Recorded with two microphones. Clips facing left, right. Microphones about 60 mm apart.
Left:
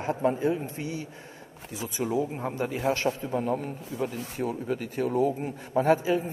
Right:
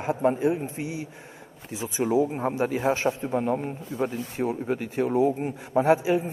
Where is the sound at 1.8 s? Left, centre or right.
Right.